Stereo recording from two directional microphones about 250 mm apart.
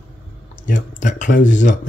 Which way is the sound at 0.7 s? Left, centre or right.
Left.